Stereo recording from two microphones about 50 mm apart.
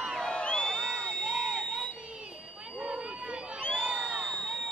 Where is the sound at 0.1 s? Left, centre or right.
Centre.